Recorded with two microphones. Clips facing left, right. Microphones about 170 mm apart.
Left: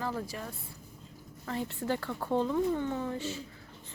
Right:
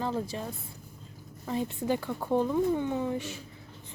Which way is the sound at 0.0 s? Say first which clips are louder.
Right 4 dB; 20° right (ahead or behind).